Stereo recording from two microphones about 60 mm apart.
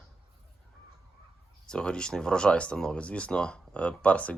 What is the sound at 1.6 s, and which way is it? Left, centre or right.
Speech, centre.